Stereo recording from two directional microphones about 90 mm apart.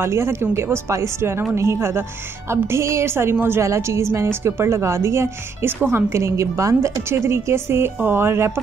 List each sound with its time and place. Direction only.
0.0 s a woman's voice: 30° right (ahead or behind)